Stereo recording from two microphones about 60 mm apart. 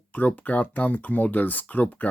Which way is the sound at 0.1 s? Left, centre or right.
Left.